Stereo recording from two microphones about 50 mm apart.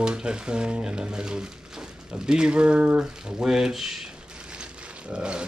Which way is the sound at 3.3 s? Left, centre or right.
Centre.